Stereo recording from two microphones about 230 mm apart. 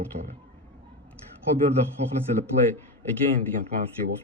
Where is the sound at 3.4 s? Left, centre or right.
Right.